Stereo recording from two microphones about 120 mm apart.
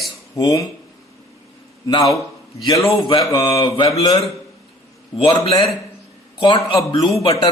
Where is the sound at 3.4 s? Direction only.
40° left (ahead or behind).